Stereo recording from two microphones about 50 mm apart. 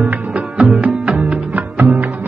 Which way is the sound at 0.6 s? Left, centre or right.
Right.